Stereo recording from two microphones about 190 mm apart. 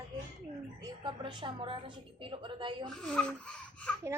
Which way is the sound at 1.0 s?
25° right (ahead or behind).